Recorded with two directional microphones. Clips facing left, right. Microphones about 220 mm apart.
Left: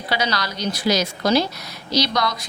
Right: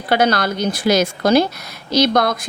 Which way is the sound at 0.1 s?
55° right (ahead or behind).